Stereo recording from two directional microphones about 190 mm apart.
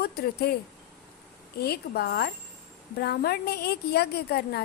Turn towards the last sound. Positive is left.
turn(degrees=55)  # may be behind; listen again after turning